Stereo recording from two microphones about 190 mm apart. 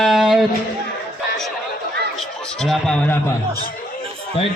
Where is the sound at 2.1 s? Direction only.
Centre (ahead or behind).